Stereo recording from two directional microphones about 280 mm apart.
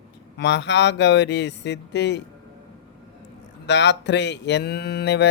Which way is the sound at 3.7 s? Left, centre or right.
Left.